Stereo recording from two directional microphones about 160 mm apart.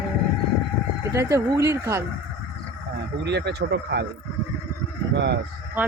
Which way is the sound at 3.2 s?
90° right.